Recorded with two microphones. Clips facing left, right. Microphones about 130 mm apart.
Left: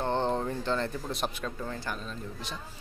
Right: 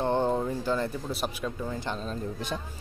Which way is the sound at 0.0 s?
10° right (ahead or behind).